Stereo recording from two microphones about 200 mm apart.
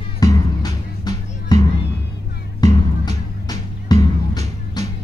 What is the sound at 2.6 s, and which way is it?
Music, 20° left (ahead or behind).